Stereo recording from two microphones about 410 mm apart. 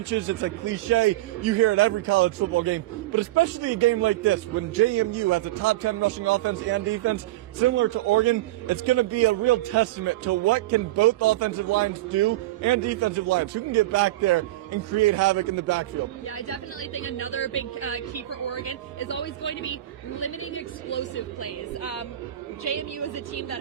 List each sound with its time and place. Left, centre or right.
0.1 s a man's voice: right
16.5 s a woman's voice: left